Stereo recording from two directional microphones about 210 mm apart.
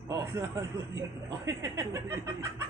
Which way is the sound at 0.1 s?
15° right (ahead or behind).